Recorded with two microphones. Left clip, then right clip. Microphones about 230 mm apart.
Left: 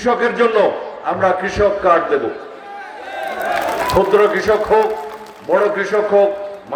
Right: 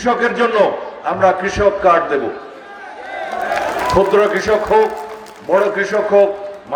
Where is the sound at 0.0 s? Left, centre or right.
Right.